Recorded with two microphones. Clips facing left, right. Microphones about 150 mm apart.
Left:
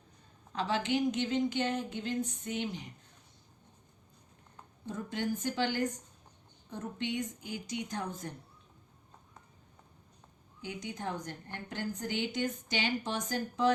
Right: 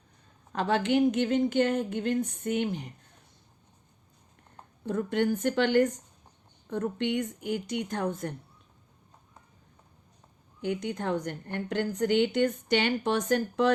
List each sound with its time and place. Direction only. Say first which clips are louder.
0.5 s a woman's voice: right 6 dB; 55° right (ahead or behind)
4.9 s a woman's voice: right 8 dB; 60° right (ahead or behind)
10.6 s a woman's voice: right 8 dB; 60° right (ahead or behind)